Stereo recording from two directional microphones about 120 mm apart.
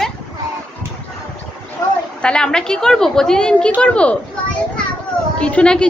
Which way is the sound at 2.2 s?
5° left (ahead or behind).